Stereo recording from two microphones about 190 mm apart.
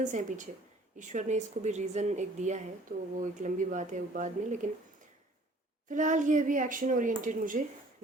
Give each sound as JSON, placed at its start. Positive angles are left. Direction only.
{"t": 0.0, "sound": "speech", "side_deg": -40}
{"t": 5.9, "sound": "speech", "side_deg": -40}